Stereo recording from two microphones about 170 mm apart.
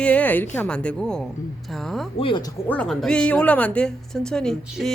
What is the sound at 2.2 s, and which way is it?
Speech, 25° left (ahead or behind).